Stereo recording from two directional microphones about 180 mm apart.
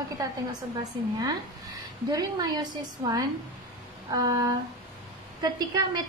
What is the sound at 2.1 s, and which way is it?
A woman's voice, 20° right (ahead or behind).